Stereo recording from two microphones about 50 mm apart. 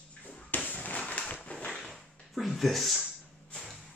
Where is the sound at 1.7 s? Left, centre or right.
Centre.